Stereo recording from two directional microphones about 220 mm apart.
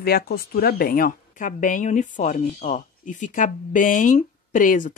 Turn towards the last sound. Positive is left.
turn(degrees=35)  # may be behind; listen again after turning